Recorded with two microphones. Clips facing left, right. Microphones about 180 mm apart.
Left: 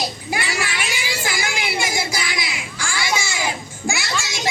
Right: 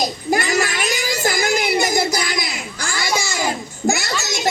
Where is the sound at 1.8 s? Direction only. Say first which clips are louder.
Right 6 dB; 40° right (ahead or behind).